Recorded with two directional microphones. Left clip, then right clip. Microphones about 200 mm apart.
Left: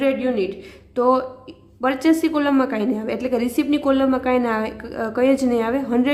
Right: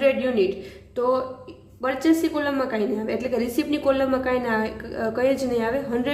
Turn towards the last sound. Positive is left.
turn(degrees=30)  # may be behind; listen again after turning